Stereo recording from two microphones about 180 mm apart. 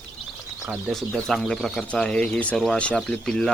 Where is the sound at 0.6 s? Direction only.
Centre (ahead or behind).